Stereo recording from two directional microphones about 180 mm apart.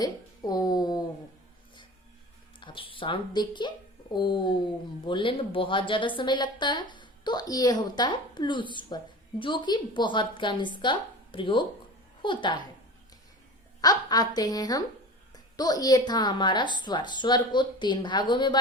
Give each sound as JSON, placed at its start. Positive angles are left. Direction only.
{"t": 0.0, "sound": "a sound", "side_deg": 20}
{"t": 2.6, "sound": "speech", "side_deg": 30}
{"t": 13.8, "sound": "speech", "side_deg": 20}